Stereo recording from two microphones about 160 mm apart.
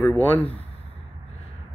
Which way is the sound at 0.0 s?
10° left (ahead or behind).